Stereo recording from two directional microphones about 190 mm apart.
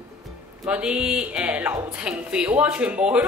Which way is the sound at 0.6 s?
5° right (ahead or behind).